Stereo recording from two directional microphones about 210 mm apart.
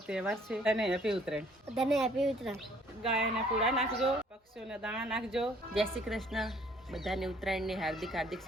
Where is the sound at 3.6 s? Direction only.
30° right (ahead or behind).